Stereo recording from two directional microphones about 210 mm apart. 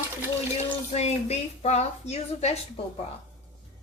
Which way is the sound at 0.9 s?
30° left (ahead or behind).